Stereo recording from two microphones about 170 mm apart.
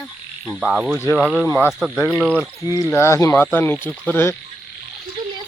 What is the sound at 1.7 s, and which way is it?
Speech, centre (ahead or behind).